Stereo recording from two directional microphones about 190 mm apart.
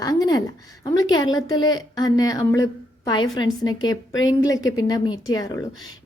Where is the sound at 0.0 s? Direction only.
20° left (ahead or behind).